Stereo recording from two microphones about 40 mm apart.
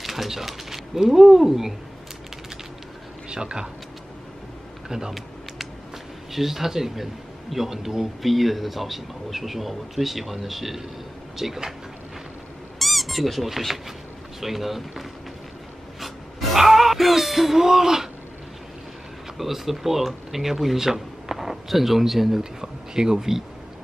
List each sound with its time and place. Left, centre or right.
0.0 s speech: centre
3.3 s speech: right
4.8 s speech: centre
6.3 s speech: centre
8.2 s speech: centre
12.7 s speech: centre
16.0 s a sound: centre
19.3 s speech: centre
22.4 s speech: centre